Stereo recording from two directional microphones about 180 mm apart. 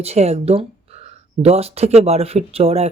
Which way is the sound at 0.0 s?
35° right (ahead or behind).